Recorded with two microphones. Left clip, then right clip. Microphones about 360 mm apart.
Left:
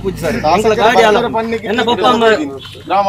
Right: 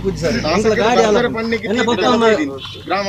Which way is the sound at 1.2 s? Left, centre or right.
Centre.